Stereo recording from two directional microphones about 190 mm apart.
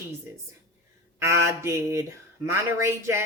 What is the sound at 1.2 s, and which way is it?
Speech, 15° right (ahead or behind).